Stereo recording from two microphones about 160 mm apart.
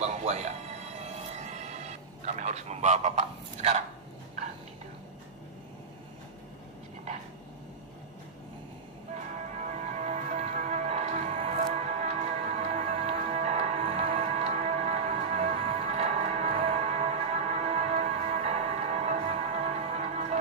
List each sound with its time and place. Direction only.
0.0 s music: 45° right (ahead or behind)
9.1 s music: 50° right (ahead or behind)